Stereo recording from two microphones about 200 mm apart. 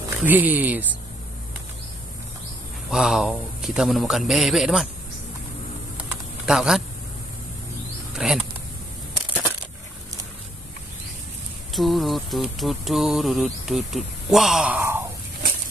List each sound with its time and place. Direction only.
0.2 s speech: 10° right (ahead or behind)
2.9 s speech: centre (ahead or behind)
5.9 s typing: 5° right (ahead or behind)
8.2 s speech: centre (ahead or behind)
11.7 s speech: centre (ahead or behind)